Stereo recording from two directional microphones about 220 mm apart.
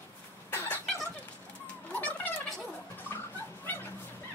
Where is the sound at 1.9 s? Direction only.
5° left (ahead or behind).